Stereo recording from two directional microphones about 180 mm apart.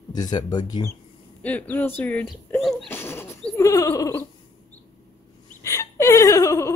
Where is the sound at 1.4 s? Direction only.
10° left (ahead or behind).